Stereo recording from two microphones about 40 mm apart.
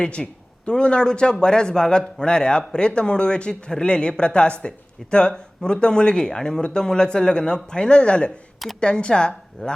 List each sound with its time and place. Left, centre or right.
0.0 s a man's voice: left